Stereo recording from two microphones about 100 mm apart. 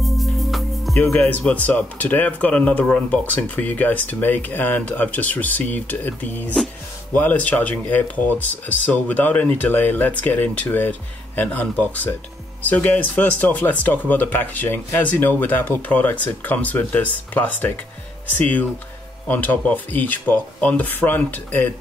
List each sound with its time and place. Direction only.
0.0 s music: centre (ahead or behind)
0.9 s speech: 15° left (ahead or behind)